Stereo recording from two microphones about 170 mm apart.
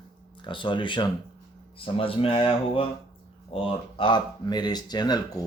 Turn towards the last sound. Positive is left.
turn(degrees=25)  # may be behind; listen again after turning